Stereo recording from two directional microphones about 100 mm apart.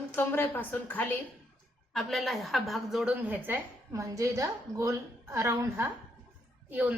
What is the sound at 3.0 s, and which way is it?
Speech, 15° right (ahead or behind).